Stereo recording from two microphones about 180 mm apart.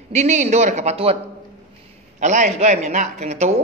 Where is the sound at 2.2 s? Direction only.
40° right (ahead or behind).